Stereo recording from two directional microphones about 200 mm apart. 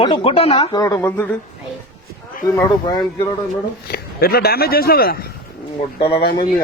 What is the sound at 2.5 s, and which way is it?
Speech, 15° left (ahead or behind).